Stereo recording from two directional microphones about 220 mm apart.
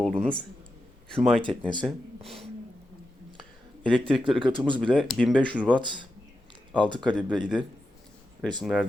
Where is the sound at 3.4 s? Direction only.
5° left (ahead or behind).